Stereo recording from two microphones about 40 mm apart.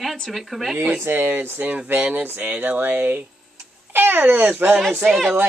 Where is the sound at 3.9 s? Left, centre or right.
Right.